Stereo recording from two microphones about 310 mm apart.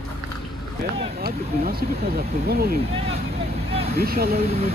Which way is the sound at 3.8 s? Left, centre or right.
Right.